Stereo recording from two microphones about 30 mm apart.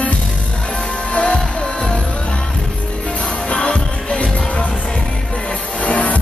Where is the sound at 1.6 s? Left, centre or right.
Left.